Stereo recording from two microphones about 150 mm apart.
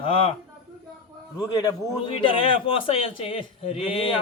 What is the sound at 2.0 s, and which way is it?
A man's voice, 35° left (ahead or behind).